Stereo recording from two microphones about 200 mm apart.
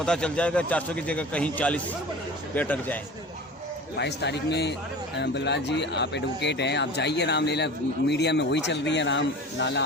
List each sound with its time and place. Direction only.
0.0 s a man's voice: 5° left (ahead or behind)
3.9 s speech: 60° left (ahead or behind)